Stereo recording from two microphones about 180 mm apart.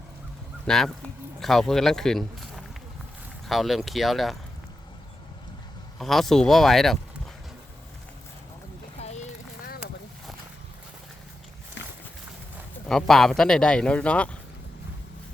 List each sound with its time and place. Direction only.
0.7 s speech: centre (ahead or behind)
6.0 s speech: centre (ahead or behind)
9.0 s a sound: 40° left (ahead or behind)
12.9 s speech: centre (ahead or behind)